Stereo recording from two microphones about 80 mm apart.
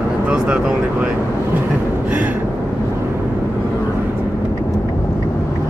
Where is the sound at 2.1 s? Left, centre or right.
Centre.